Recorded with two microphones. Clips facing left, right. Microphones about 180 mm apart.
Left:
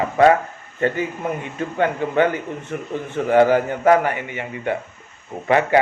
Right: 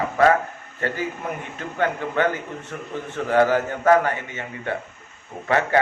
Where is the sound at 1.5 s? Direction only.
20° left (ahead or behind).